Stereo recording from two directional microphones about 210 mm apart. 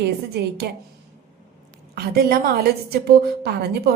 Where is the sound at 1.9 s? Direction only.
50° right (ahead or behind).